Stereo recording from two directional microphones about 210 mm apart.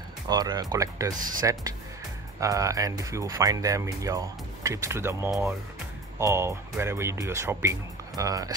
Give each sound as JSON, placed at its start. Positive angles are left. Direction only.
{"t": 0.3, "sound": "speech", "side_deg": -20}
{"t": 1.1, "sound": "speech", "side_deg": -40}
{"t": 1.4, "sound": "speech", "side_deg": -15}